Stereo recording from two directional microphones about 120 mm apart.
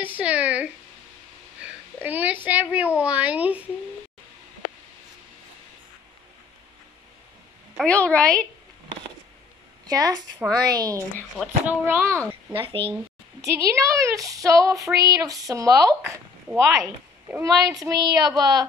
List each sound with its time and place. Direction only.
0.0 s a woman's voice: 10° right (ahead or behind)
1.6 s a sound: 15° right (ahead or behind)
2.4 s a woman's voice: 15° right (ahead or behind)
7.7 s a woman's voice: 10° left (ahead or behind)
9.8 s speech: 30° right (ahead or behind)
11.6 s a woman's voice: 15° right (ahead or behind)
12.5 s speech: 45° right (ahead or behind)
13.4 s speech: 25° right (ahead or behind)